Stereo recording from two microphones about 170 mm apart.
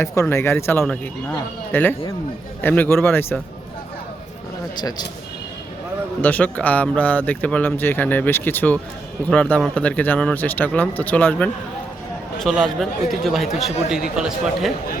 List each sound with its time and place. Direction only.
0.0 s speech: 15° left (ahead or behind)
4.8 s speech: 25° left (ahead or behind)
6.2 s speech: 10° left (ahead or behind)